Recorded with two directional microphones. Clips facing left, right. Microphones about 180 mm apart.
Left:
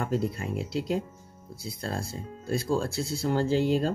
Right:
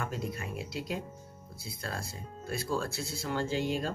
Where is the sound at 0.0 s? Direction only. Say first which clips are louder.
Left 7 dB; 35° left (ahead or behind).